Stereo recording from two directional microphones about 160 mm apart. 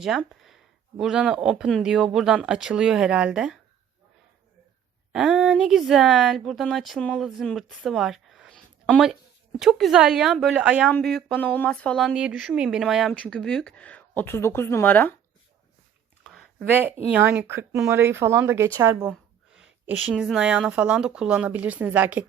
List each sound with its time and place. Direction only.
0.2 s speech: centre (ahead or behind)
5.1 s speech: 5° right (ahead or behind)
16.2 s a sound: centre (ahead or behind)
16.6 s a woman's voice: 10° right (ahead or behind)
20.1 s a woman's voice: 5° right (ahead or behind)